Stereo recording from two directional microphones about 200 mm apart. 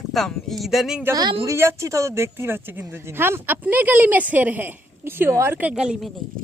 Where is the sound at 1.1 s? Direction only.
20° right (ahead or behind); by 6.1 s 5° right (ahead or behind).